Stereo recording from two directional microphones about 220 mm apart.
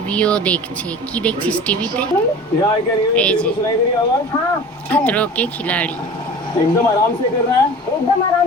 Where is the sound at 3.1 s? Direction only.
5° left (ahead or behind).